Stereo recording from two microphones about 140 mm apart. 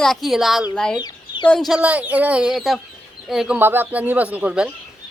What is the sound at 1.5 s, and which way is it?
A woman's voice, centre (ahead or behind).